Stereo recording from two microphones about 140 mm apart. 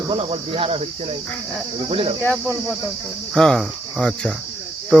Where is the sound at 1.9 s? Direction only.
40° right (ahead or behind).